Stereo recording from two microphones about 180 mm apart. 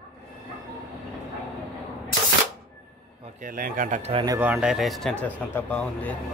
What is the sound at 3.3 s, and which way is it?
Speech, 50° right (ahead or behind).